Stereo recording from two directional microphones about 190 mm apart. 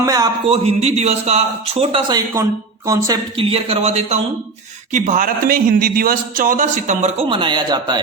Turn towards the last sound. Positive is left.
turn(degrees=-25)  # may be behind; listen again after turning